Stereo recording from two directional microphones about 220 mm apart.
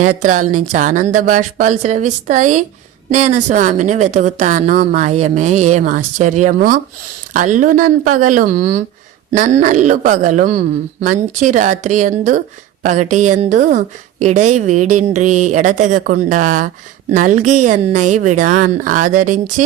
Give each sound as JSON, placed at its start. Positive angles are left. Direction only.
{"t": 0.0, "sound": "a woman's voice", "side_deg": -35}